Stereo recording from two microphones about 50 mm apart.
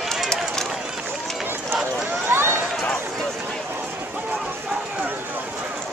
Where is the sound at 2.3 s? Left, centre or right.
Right.